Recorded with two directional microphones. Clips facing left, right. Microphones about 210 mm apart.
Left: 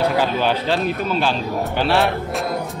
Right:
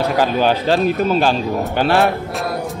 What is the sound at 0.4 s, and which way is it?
Speech, 45° right (ahead or behind).